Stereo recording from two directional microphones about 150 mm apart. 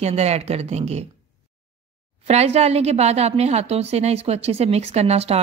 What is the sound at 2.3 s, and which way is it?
A woman's voice, 45° right (ahead or behind).